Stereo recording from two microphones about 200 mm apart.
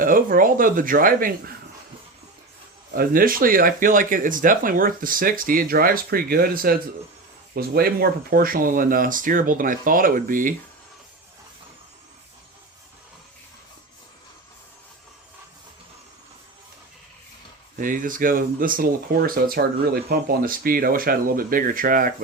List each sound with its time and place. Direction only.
0.0 s speech: 45° right (ahead or behind)
2.9 s speech: 45° right (ahead or behind)
17.7 s speech: 40° right (ahead or behind)